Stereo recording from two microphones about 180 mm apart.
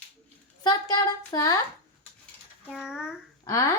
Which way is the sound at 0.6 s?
20° left (ahead or behind).